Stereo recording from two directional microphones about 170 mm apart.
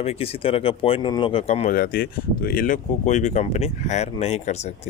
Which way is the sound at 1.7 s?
60° left (ahead or behind).